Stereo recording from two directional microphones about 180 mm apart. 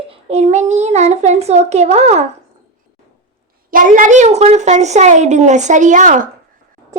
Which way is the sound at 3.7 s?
50° right (ahead or behind).